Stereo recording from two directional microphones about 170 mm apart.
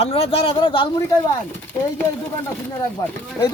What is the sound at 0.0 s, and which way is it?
Speech, 35° left (ahead or behind).